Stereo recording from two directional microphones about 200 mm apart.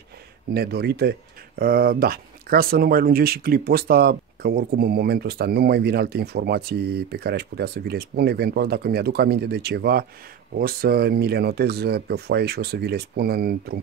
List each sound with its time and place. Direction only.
0.5 s speech: 50° right (ahead or behind)